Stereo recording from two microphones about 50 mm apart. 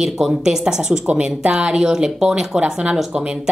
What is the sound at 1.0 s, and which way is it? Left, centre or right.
Speech, right.